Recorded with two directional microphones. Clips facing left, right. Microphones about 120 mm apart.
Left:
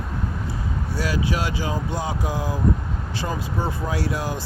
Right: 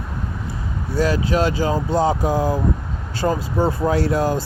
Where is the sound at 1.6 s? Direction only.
45° right (ahead or behind).